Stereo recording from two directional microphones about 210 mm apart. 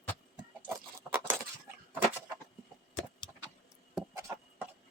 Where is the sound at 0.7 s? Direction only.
10° right (ahead or behind).